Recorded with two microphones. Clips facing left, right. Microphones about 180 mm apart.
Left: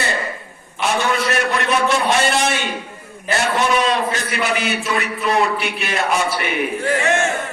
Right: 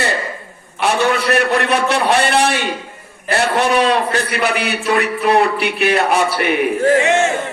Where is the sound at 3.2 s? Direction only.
60° right (ahead or behind).